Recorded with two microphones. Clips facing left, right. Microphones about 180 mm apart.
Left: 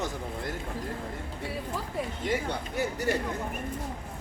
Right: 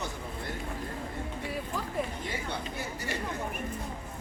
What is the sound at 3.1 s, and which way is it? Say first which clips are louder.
Chatter: left 8 dB; 50° left (ahead or behind).